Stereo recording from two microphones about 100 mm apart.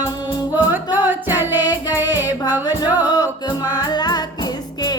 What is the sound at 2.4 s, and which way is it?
Music, 45° left (ahead or behind).